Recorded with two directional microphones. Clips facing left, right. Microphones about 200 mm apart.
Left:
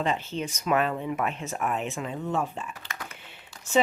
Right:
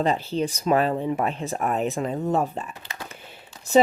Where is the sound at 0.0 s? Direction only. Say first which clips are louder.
Right 5 dB; 35° right (ahead or behind).